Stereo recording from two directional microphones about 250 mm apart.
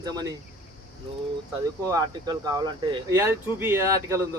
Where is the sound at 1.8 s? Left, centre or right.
Centre.